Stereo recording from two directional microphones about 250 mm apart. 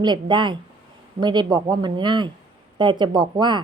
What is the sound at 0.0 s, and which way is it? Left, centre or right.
A woman's voice, centre.